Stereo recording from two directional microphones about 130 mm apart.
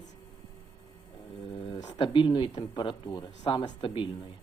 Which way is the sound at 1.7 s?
30° left (ahead or behind).